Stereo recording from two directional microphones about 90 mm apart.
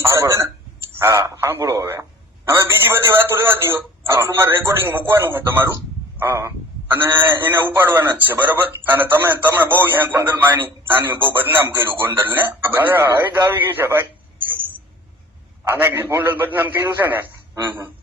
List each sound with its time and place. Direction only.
0.0 s a sound: 30° right (ahead or behind)
0.9 s a man's voice: 35° right (ahead or behind)
15.6 s a man's voice: 25° right (ahead or behind)